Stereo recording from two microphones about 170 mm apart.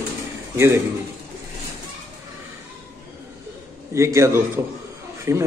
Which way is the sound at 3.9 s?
15° right (ahead or behind).